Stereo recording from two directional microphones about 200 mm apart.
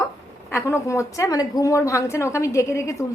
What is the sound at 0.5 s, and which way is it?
A woman's voice, 15° left (ahead or behind).